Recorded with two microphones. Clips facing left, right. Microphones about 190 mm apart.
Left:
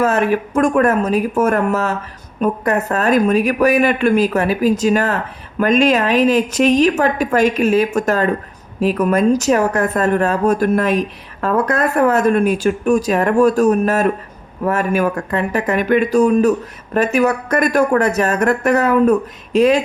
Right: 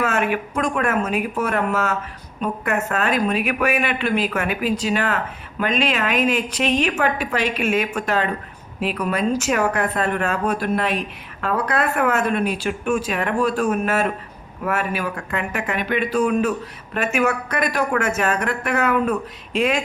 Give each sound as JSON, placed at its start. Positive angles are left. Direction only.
{"t": 0.0, "sound": "a woman's voice", "side_deg": 35}